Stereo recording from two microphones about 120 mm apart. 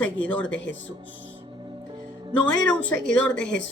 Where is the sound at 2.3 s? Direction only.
10° left (ahead or behind).